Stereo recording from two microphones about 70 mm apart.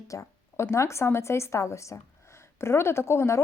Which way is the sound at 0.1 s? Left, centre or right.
Left.